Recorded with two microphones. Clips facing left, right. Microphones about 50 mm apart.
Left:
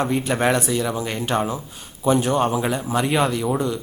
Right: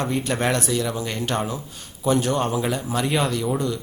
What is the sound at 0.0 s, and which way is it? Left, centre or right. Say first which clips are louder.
Speech: left 3 dB; centre.